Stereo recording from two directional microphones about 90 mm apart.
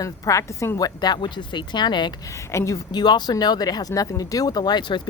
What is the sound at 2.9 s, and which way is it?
Speech, 55° left (ahead or behind).